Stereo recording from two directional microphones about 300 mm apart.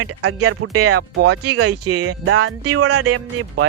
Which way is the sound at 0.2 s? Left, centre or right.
Right.